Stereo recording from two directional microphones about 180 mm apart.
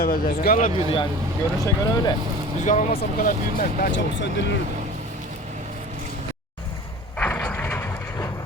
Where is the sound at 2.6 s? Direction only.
45° left (ahead or behind).